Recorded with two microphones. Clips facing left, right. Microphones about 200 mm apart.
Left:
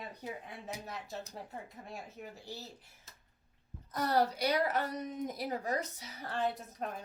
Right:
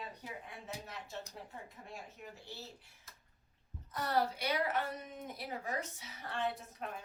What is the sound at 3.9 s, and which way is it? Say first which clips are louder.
A woman's voice: left 4 dB; 40° left (ahead or behind).